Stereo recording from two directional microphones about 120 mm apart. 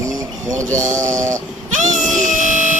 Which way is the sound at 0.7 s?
90° right.